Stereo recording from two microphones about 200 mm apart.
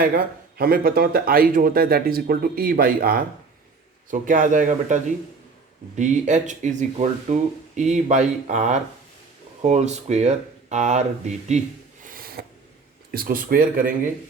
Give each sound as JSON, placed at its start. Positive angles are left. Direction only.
{"t": 0.0, "sound": "speech", "side_deg": -45}
{"t": 6.0, "sound": "speech", "side_deg": -35}
{"t": 12.0, "sound": "a sound", "side_deg": -45}
{"t": 13.1, "sound": "speech", "side_deg": -50}